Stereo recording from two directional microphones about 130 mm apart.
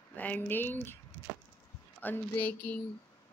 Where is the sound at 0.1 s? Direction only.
15° left (ahead or behind).